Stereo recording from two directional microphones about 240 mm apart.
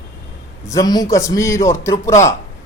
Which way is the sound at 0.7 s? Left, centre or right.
Centre.